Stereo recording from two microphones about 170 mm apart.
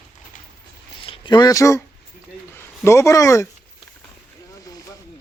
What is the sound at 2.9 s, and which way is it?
Speech, 15° left (ahead or behind).